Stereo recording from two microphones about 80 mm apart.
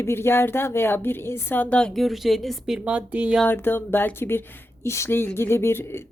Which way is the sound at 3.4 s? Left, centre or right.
Left.